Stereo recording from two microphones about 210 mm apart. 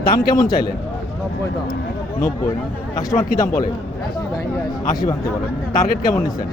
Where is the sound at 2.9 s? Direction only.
15° left (ahead or behind).